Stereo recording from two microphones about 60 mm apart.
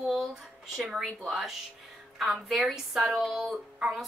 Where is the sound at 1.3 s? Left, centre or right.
Centre.